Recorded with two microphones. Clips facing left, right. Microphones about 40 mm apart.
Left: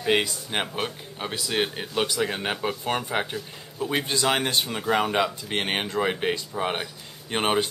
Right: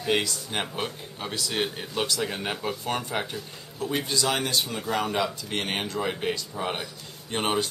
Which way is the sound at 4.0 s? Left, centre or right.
Left.